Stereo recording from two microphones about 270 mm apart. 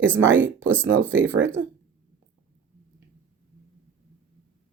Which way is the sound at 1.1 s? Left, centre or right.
Right.